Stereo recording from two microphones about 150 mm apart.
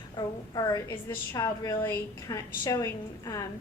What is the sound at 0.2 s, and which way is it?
A woman's voice, 25° left (ahead or behind).